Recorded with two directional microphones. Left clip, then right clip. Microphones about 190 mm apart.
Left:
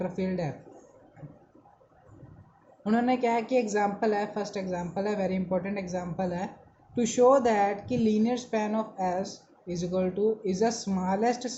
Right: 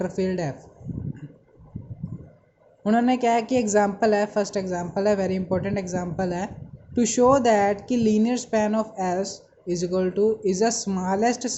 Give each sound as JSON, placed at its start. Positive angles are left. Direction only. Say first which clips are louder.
{"t": 0.0, "sound": "speech", "louder": "right 6 dB", "side_deg": -30}
{"t": 2.8, "sound": "speech", "louder": "right 5 dB", "side_deg": -25}